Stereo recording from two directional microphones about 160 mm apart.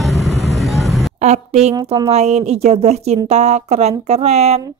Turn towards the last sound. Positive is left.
turn(degrees=-40)  # may be behind; listen again after turning